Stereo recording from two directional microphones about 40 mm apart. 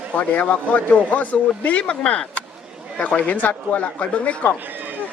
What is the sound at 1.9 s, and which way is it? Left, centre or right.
Speech, left.